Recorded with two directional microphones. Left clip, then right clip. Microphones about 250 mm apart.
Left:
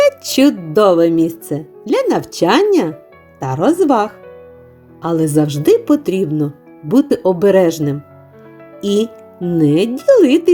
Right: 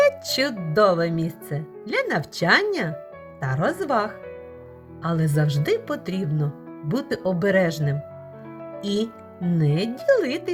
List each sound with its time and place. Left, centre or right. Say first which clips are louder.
0.3 s speech: left 10 dB; left